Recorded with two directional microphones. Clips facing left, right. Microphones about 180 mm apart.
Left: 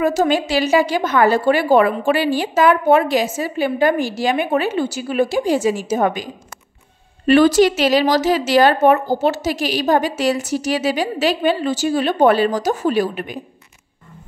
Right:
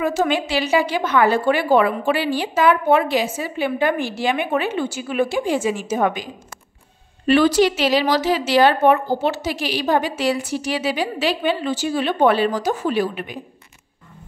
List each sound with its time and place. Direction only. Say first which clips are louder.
0.0 s a woman's voice: left 3 dB; 40° left (ahead or behind)
7.2 s speech: left 3 dB; 45° left (ahead or behind)